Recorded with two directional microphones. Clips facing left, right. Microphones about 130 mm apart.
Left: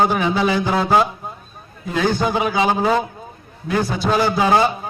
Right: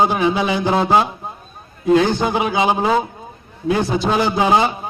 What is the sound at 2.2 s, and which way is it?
A man's voice, 20° right (ahead or behind).